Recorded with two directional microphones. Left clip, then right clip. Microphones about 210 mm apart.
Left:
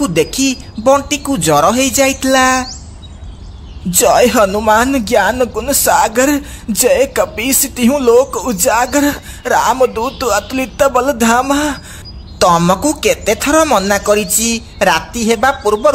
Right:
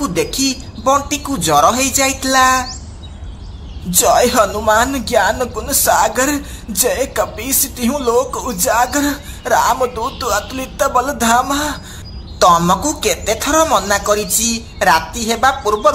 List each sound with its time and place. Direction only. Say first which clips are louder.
0.0 s speech: left 3 dB; 50° left (ahead or behind)
3.9 s speech: left 2 dB; 50° left (ahead or behind)